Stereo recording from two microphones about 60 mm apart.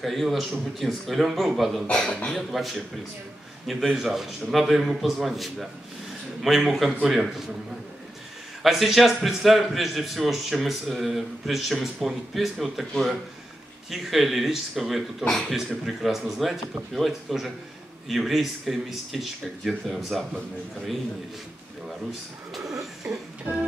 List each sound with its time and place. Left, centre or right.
0.0 s a man's voice: centre
1.9 s speech: centre
2.3 s a man's voice: centre
8.6 s a man's voice: centre
22.5 s a man's voice: centre
23.5 s organ: right